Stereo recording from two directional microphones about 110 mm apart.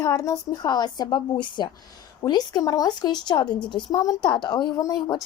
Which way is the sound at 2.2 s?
35° left (ahead or behind).